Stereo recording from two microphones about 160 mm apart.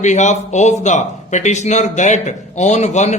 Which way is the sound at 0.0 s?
50° left (ahead or behind).